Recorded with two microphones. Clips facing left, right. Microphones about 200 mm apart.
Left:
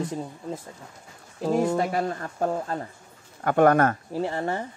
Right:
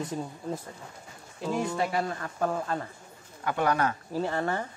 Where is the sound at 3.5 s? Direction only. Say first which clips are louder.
Left 8 dB; 50° left (ahead or behind).